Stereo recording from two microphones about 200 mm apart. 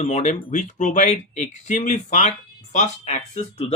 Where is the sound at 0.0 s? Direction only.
35° left (ahead or behind).